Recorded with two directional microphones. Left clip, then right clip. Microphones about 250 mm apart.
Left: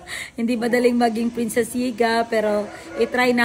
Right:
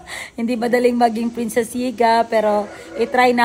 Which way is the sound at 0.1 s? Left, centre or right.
Centre.